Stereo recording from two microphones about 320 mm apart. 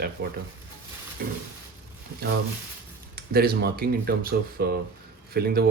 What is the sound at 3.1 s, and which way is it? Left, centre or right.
Speech, right.